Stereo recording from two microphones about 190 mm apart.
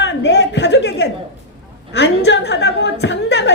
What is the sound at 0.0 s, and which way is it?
A woman's voice, 65° left (ahead or behind).